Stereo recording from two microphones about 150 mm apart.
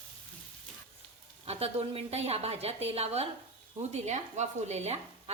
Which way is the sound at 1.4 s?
40° right (ahead or behind).